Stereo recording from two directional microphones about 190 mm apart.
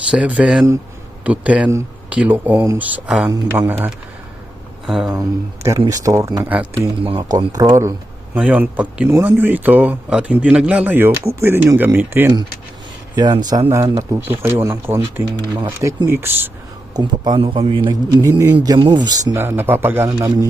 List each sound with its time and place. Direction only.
0.1 s speech: 5° right (ahead or behind)
3.2 s speech: 15° right (ahead or behind)
5.8 s a man's voice: 20° right (ahead or behind)
13.1 s speech: 20° right (ahead or behind)
16.9 s a man's voice: 25° right (ahead or behind)